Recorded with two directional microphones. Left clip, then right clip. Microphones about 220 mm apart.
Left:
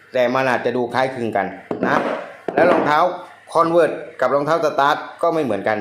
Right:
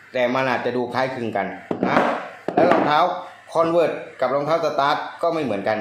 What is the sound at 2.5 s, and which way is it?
Speech, 25° left (ahead or behind).